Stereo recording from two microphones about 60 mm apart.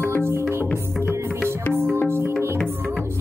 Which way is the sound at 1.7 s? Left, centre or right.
Right.